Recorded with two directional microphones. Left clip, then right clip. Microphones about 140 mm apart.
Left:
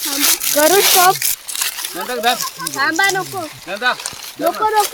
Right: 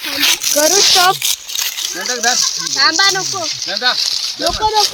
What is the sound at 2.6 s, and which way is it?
Speech, 50° left (ahead or behind).